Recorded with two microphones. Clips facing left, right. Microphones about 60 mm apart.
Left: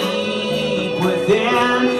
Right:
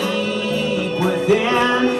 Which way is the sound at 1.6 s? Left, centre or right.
Left.